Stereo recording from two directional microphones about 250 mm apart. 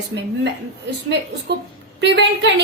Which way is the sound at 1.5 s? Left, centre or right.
Right.